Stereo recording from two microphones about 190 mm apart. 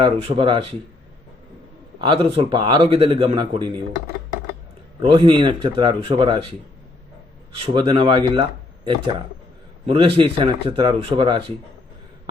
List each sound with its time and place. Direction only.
0.0 s speech: 30° right (ahead or behind)
2.0 s speech: 30° right (ahead or behind)
7.7 s speech: 25° right (ahead or behind)